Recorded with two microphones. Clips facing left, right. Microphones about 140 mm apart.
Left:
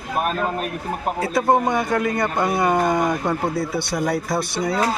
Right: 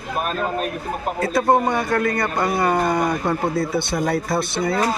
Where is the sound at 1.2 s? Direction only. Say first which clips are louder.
Right 1 dB; 10° left (ahead or behind).